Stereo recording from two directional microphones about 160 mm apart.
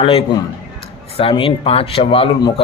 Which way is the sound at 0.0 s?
35° left (ahead or behind).